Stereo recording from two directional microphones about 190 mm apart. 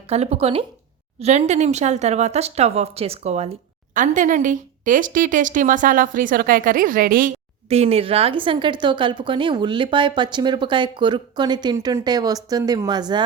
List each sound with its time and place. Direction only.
0.1 s a woman's voice: 35° right (ahead or behind)
7.7 s a woman's voice: 35° right (ahead or behind)